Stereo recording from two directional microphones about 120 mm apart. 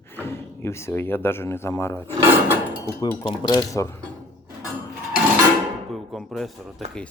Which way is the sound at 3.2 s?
40° left (ahead or behind).